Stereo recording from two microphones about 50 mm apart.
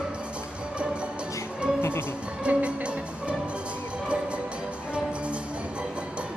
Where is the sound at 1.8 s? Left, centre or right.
Left.